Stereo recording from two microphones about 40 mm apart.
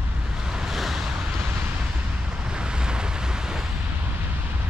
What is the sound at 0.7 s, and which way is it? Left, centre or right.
Vehicle, centre.